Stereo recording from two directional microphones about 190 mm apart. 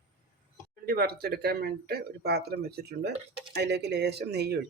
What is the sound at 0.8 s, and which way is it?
Speech, 55° right (ahead or behind).